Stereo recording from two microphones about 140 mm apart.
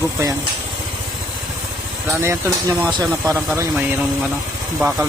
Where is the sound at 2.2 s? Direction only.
20° right (ahead or behind).